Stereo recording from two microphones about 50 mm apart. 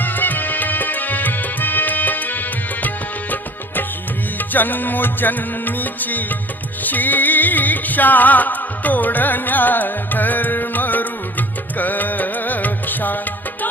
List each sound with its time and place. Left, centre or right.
0.0 s music: left